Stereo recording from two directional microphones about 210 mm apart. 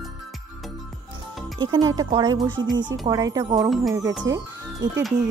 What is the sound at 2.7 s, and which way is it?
Speech, 60° right (ahead or behind).